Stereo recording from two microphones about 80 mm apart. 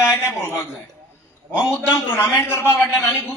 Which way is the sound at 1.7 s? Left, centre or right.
Left.